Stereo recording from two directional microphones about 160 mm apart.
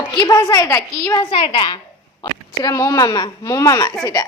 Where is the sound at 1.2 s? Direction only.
35° left (ahead or behind).